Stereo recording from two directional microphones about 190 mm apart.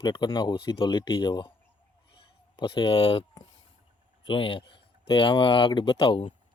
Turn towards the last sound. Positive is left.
turn(degrees=30)  # may be behind; listen again after turning